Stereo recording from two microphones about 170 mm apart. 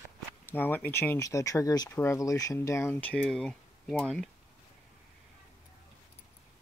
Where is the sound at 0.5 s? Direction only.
10° left (ahead or behind).